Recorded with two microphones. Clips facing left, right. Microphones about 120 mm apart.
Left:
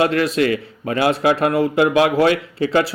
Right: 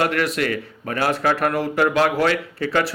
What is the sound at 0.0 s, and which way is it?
Speech, 25° left (ahead or behind).